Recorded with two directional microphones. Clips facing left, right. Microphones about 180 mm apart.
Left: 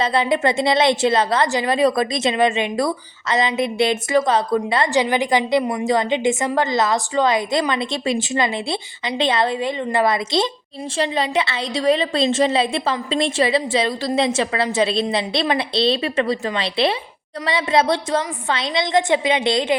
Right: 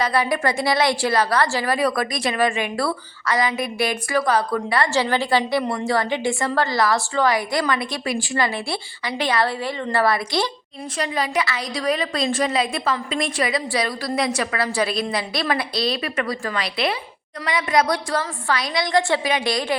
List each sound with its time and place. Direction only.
0.0 s a woman's voice: 25° left (ahead or behind)